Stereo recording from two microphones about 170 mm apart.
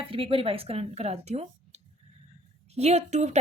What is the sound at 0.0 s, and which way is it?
A woman's voice, 30° right (ahead or behind).